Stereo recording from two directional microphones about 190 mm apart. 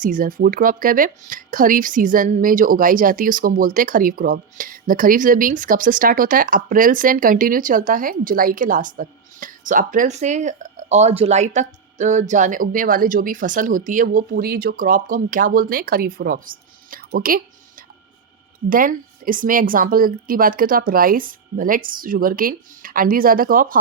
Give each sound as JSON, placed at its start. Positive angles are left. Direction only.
{"t": 0.0, "sound": "speech", "side_deg": -45}